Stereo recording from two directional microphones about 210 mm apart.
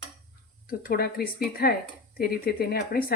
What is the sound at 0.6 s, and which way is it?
Speech, 45° left (ahead or behind).